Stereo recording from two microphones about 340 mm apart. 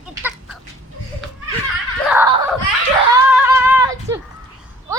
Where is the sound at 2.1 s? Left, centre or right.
Centre.